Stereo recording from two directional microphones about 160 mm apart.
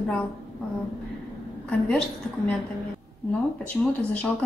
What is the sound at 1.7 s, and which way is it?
Speech, 10° left (ahead or behind).